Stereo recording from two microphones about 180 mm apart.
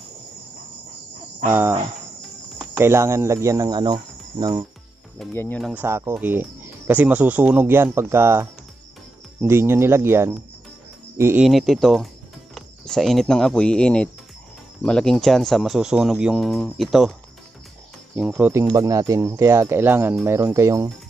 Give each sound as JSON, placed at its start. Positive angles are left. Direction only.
{"t": 1.5, "sound": "speech", "side_deg": -10}
{"t": 2.6, "sound": "cricket", "side_deg": -15}
{"t": 5.3, "sound": "speech", "side_deg": 15}
{"t": 5.6, "sound": "speech", "side_deg": 0}
{"t": 5.9, "sound": "speech", "side_deg": -15}
{"t": 11.4, "sound": "speech", "side_deg": 0}
{"t": 18.1, "sound": "speech", "side_deg": -10}